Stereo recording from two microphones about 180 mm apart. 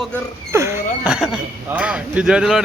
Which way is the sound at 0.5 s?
15° right (ahead or behind).